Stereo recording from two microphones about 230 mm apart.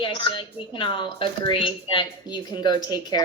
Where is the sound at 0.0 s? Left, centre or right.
Left.